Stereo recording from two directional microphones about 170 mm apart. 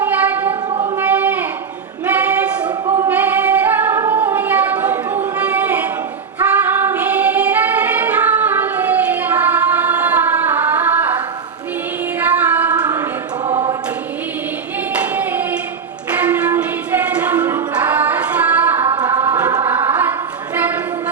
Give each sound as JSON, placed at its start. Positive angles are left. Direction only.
{"t": 0.0, "sound": "a sound", "side_deg": -10}
{"t": 2.0, "sound": "female singing", "side_deg": -10}
{"t": 6.7, "sound": "singing", "side_deg": -10}
{"t": 12.2, "sound": "child singing", "side_deg": -10}
{"t": 12.9, "sound": "choir", "side_deg": -20}
{"t": 14.9, "sound": "singing", "side_deg": -10}
{"t": 19.2, "sound": "music", "side_deg": -10}
{"t": 19.6, "sound": "choir", "side_deg": -10}
{"t": 20.6, "sound": "a sound", "side_deg": -10}